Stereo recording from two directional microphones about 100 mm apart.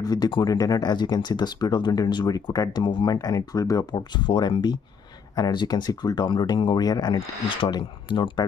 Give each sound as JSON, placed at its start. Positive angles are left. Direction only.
{"t": 0.0, "sound": "speech", "side_deg": 40}